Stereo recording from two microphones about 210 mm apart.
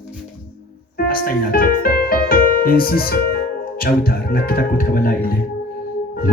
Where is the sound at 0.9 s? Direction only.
45° left (ahead or behind).